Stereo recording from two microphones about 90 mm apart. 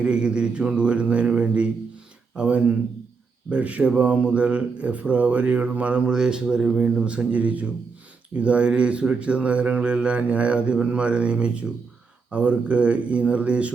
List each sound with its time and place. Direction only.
0.0 s speech: 10° right (ahead or behind)